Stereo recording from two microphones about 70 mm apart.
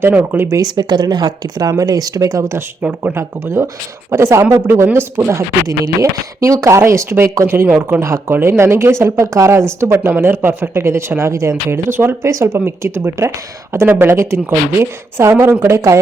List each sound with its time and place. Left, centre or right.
0.1 s speech: right
0.5 s speech: right
2.8 s speech: right
3.2 s speech: right
5.6 s speech: right
7.4 s speech: right
9.5 s speech: right
11.9 s speech: right
12.2 s speech: right
12.5 s speech: right